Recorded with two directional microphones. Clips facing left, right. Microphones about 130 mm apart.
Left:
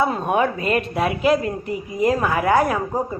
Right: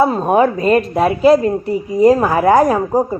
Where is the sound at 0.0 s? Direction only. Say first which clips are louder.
Right 7 dB; 35° right (ahead or behind).